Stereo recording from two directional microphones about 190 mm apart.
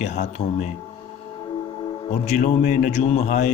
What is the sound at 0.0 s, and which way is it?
Speech, 40° left (ahead or behind).